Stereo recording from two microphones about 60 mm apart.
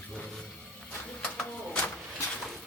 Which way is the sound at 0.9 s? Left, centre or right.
Left.